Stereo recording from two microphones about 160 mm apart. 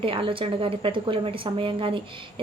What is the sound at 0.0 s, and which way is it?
A woman's voice, 35° right (ahead or behind).